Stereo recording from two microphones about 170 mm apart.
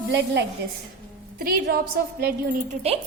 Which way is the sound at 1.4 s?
60° right (ahead or behind).